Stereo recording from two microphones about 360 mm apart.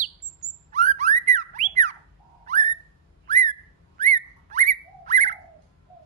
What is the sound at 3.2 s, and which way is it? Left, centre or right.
Whistling, centre.